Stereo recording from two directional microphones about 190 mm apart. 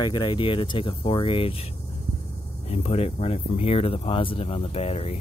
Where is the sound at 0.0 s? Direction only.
25° left (ahead or behind).